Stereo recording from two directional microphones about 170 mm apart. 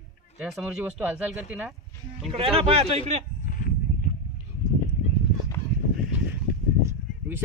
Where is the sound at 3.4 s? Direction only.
55° left (ahead or behind).